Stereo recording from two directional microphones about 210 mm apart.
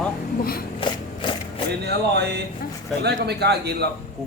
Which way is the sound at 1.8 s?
50° right (ahead or behind).